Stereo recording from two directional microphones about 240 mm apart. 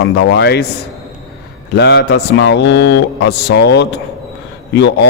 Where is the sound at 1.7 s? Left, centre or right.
Left.